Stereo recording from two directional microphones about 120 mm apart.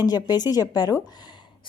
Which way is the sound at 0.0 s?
35° left (ahead or behind).